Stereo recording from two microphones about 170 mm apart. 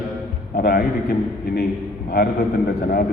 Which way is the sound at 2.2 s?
70° left (ahead or behind).